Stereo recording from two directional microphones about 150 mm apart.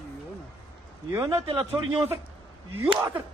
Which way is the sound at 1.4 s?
35° right (ahead or behind).